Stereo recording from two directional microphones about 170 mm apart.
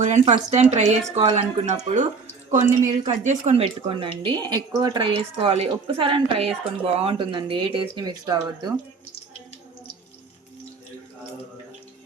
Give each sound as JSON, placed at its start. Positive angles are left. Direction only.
{"t": 0.0, "sound": "a woman's voice", "side_deg": -45}